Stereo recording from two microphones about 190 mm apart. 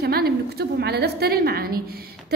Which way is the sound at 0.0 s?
55° right (ahead or behind).